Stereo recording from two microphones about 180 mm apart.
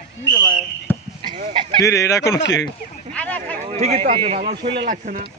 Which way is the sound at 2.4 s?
80° left.